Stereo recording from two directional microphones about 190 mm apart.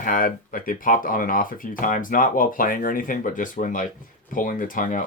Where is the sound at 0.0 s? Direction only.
45° left (ahead or behind).